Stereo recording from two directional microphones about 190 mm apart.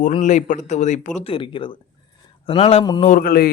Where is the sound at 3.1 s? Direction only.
50° left (ahead or behind).